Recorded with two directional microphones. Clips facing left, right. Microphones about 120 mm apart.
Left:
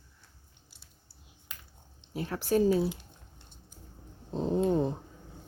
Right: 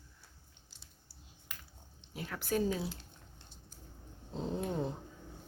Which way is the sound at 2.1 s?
35° left (ahead or behind).